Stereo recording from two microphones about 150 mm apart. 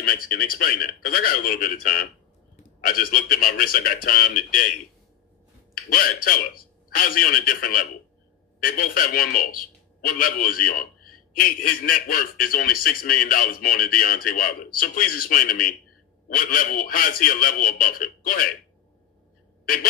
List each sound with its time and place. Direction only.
0.0 s a man's voice: 70° left (ahead or behind)
5.9 s a man's voice: 70° left (ahead or behind)